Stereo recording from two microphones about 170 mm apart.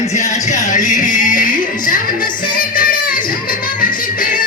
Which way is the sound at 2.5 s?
55° left (ahead or behind).